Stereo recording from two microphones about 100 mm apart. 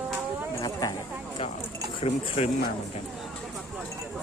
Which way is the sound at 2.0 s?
65° left (ahead or behind).